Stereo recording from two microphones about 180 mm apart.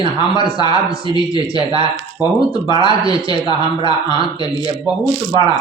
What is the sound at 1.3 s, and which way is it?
Speech, 30° right (ahead or behind).